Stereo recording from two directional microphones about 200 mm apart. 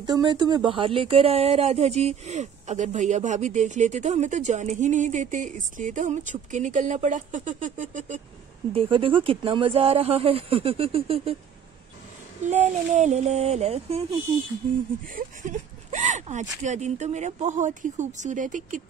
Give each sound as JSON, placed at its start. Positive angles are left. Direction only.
{"t": 0.0, "sound": "speech", "side_deg": -20}
{"t": 8.9, "sound": "speech", "side_deg": -25}
{"t": 12.4, "sound": "speech", "side_deg": -35}
{"t": 15.1, "sound": "speech", "side_deg": -35}